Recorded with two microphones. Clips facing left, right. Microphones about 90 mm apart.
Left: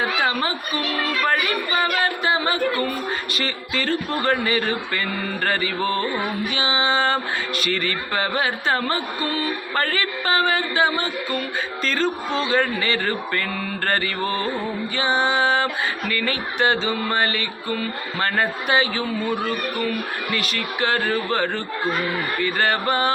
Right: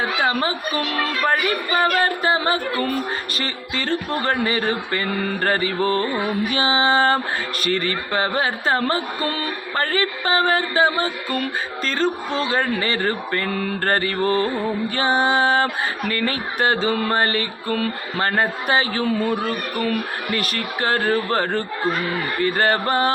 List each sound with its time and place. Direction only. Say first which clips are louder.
0.0 s a man's voice: right 1 dB; 30° right (ahead or behind)
14.9 s a man's voice: right 1 dB; 45° right (ahead or behind)
16.7 s mantra: right 2 dB; 50° right (ahead or behind)
18.2 s a man's voice: right 2 dB; 30° right (ahead or behind)